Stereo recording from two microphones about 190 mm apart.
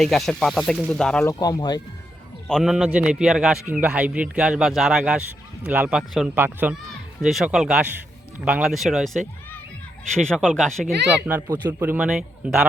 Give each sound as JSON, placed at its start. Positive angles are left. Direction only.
{"t": 0.0, "sound": "a man's voice", "side_deg": 0}
{"t": 1.2, "sound": "speech", "side_deg": 20}
{"t": 2.5, "sound": "a man's voice", "side_deg": 0}
{"t": 10.2, "sound": "a man's voice", "side_deg": 5}
{"t": 11.5, "sound": "a man's voice", "side_deg": -10}